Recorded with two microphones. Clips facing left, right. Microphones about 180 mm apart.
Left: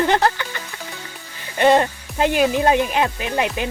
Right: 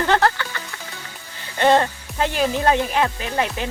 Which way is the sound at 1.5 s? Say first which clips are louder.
Left 2 dB; 15° left (ahead or behind).